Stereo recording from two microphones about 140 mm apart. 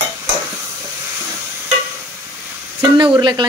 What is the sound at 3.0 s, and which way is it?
Speech, 35° right (ahead or behind).